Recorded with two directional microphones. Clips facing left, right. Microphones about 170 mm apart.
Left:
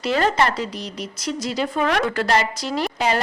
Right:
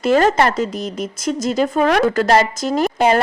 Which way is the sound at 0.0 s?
45° right (ahead or behind).